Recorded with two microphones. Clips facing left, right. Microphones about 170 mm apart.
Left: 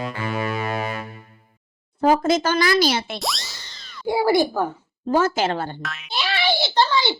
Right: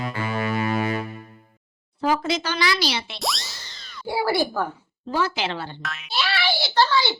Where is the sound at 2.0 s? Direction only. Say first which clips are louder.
Left 5 dB; 45° left (ahead or behind).